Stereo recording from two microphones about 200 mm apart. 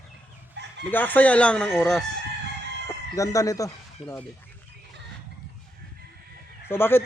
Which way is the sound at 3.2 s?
15° left (ahead or behind).